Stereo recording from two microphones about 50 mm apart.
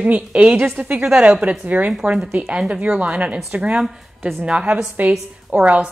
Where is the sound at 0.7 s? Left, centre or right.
Right.